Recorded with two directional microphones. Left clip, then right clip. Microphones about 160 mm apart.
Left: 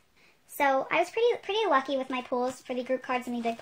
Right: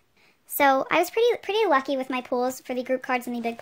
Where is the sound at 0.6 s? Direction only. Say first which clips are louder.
Right 5 dB; 50° right (ahead or behind).